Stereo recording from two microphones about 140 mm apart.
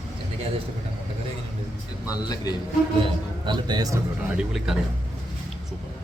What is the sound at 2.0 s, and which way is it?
Speech, 25° left (ahead or behind).